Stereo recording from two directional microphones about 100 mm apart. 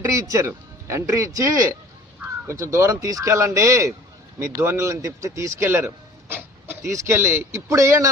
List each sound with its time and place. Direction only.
0.0 s speech: 35° right (ahead or behind)